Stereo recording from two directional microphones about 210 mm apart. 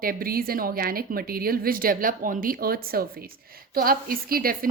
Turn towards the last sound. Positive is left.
turn(degrees=-45)  # may be behind; listen again after turning